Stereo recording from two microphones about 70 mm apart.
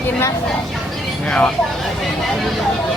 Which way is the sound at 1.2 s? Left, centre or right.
Centre.